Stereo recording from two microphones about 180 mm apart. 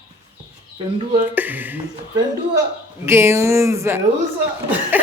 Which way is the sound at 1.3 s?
10° right (ahead or behind).